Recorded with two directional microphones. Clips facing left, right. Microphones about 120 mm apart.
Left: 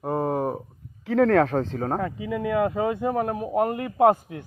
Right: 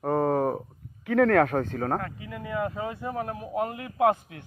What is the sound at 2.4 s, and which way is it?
A man's voice, 85° left.